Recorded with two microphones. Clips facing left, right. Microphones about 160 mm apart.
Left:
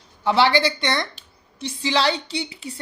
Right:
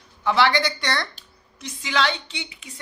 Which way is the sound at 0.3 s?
30° left (ahead or behind).